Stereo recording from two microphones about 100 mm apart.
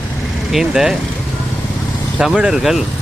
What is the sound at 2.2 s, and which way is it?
Speech, 5° right (ahead or behind).